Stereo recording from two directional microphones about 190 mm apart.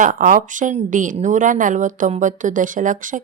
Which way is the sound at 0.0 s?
45° right (ahead or behind).